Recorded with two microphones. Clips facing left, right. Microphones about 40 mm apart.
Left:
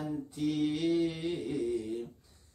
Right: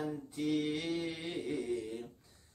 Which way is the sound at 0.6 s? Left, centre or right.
Centre.